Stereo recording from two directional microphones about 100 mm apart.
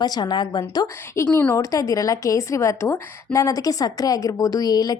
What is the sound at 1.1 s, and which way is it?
A woman's voice, 30° left (ahead or behind).